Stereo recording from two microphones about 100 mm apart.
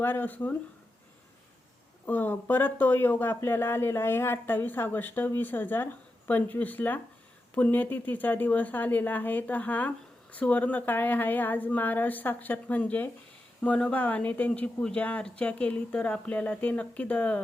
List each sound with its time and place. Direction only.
0.0 s speech: 20° left (ahead or behind)
2.0 s speech: 20° left (ahead or behind)